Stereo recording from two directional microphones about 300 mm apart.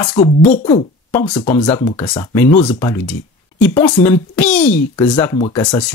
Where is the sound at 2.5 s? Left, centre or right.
Left.